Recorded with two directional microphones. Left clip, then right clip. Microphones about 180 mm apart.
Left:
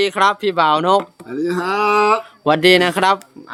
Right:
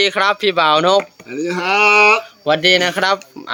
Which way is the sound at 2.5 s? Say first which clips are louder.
Left 1 dB; 35° left (ahead or behind).